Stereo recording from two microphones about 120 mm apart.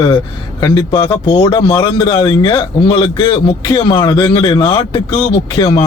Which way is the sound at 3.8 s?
45° left (ahead or behind).